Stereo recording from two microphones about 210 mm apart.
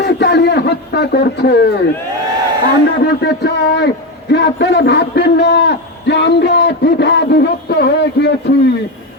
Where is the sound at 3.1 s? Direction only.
55° left (ahead or behind).